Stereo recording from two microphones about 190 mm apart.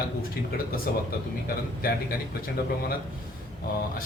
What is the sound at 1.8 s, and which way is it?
Speech, 50° left (ahead or behind).